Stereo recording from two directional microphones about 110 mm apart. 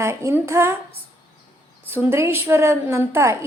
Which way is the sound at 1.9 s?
20° right (ahead or behind).